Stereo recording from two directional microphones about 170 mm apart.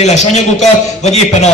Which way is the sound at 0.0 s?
40° left (ahead or behind).